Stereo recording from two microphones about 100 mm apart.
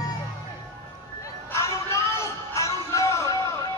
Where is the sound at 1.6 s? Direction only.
30° left (ahead or behind).